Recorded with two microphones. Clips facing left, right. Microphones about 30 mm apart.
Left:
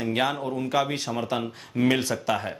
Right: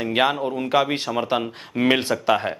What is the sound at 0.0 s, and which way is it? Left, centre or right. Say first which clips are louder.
Speech: right 5 dB; right.